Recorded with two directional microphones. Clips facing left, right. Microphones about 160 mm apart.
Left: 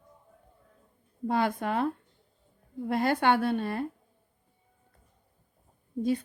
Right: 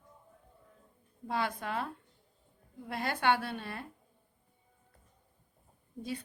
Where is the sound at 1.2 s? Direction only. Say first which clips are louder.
Left 7 dB; 50° left (ahead or behind).